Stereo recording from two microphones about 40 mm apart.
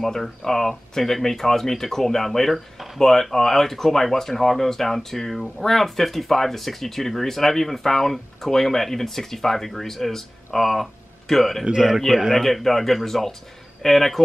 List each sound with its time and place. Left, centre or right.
0.0 s speech: centre
11.6 s a man's voice: centre
12.4 s speech: centre